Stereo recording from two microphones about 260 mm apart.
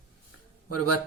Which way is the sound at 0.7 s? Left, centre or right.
Left.